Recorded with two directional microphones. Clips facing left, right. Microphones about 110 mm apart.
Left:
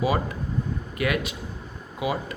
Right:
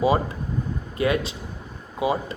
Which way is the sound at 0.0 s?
25° right (ahead or behind).